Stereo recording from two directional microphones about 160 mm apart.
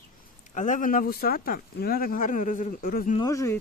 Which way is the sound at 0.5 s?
50° left (ahead or behind).